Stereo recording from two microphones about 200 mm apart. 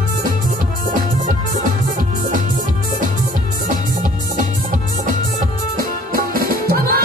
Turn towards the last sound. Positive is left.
turn(degrees=-50)  # may be behind; listen again after turning